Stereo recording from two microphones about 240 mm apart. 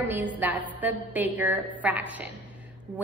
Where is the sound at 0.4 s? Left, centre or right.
Centre.